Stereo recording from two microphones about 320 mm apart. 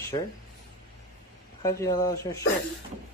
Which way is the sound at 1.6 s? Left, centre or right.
Centre.